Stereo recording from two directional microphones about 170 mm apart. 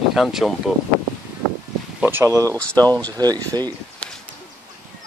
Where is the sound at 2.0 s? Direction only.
15° right (ahead or behind).